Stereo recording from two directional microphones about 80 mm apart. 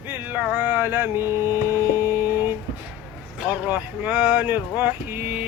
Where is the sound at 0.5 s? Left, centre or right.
Right.